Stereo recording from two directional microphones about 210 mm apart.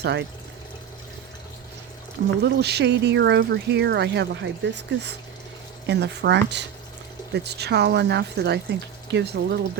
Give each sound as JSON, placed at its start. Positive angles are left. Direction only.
{"t": 0.0, "sound": "speech", "side_deg": -50}
{"t": 2.4, "sound": "speech", "side_deg": -50}